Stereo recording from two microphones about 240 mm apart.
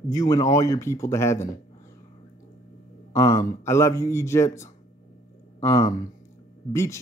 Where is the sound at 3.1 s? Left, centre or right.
Centre.